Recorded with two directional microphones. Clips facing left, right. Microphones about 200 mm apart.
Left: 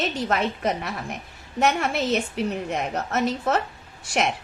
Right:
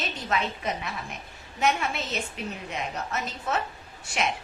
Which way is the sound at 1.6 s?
75° left (ahead or behind).